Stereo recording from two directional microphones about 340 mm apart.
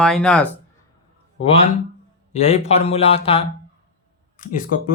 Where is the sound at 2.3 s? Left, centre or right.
Centre.